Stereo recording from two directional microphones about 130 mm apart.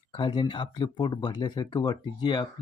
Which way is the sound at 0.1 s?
35° left (ahead or behind).